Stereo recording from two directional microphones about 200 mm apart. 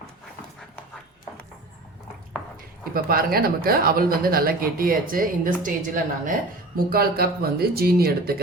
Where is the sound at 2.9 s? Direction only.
50° right (ahead or behind).